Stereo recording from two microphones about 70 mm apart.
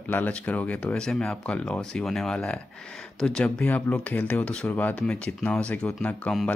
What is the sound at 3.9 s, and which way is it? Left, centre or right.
Speech, left.